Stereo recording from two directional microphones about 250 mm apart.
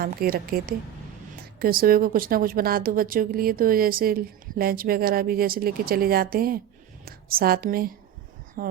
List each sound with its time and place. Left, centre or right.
0.0 s a woman's voice: right